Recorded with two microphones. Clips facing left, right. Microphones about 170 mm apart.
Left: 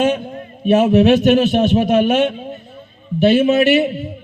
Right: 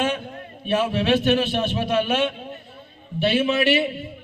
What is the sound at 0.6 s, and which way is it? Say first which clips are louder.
A man's voice: left 10 dB; 45° left (ahead or behind).